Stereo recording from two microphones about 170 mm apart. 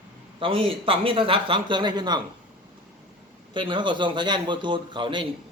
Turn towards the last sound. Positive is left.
turn(degrees=-30)  # may be behind; listen again after turning